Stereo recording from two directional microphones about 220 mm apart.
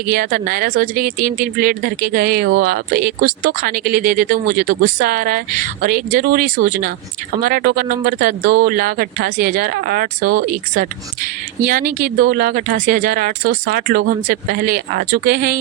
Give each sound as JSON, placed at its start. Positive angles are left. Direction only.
{"t": 0.1, "sound": "speech", "side_deg": -40}